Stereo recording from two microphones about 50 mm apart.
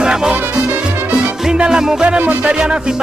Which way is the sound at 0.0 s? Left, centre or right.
Centre.